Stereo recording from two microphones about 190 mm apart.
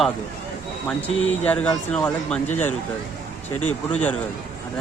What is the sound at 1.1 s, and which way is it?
Speech, 90° left.